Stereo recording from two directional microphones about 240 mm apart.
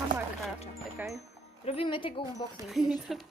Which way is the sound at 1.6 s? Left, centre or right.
Left.